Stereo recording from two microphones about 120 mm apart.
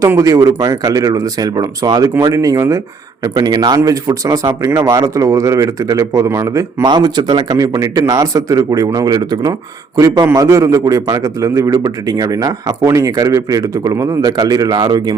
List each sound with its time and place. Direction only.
0.0 s speech: 25° right (ahead or behind)